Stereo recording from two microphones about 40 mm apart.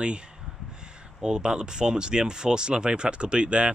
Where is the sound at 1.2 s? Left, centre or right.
Centre.